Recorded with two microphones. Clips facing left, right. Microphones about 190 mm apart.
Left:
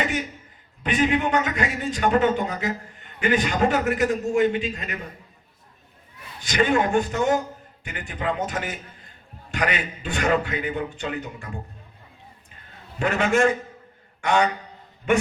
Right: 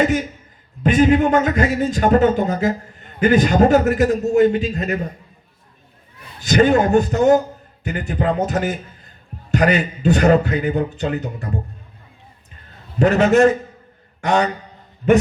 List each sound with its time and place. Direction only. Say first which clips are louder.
0.0 s a man's voice: right 9 dB; 40° right (ahead or behind)
6.4 s a man's voice: right 7 dB; 40° right (ahead or behind)
13.0 s a man's voice: right 8 dB; 40° right (ahead or behind)